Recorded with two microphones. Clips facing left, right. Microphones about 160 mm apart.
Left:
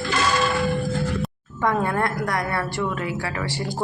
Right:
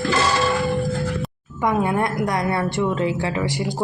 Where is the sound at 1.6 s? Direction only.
15° right (ahead or behind).